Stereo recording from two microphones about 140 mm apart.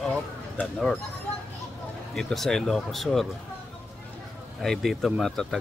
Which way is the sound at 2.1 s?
5° left (ahead or behind).